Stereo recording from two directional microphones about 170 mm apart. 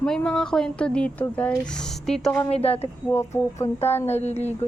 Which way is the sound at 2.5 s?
35° left (ahead or behind).